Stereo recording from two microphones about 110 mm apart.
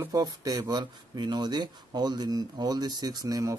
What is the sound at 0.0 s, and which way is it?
Speech, 35° right (ahead or behind).